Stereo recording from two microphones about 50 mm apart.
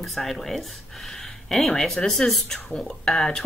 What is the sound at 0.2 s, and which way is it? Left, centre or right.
Speech, centre.